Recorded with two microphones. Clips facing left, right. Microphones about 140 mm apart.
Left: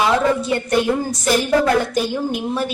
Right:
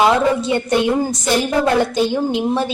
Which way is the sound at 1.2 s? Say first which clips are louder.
Left 4 dB; 25° right (ahead or behind).